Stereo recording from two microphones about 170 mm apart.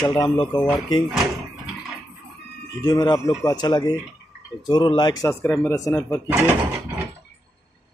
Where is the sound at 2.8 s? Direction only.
25° left (ahead or behind).